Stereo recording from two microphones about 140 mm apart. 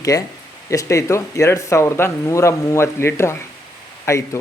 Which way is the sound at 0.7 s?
20° left (ahead or behind).